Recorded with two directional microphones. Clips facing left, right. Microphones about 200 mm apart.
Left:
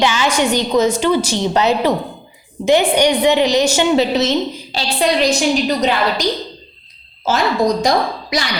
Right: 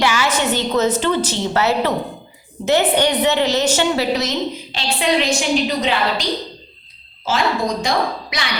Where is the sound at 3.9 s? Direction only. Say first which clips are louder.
Left 5 dB; 25° left (ahead or behind).